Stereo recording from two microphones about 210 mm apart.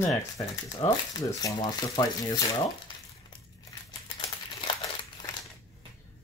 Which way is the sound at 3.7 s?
20° left (ahead or behind).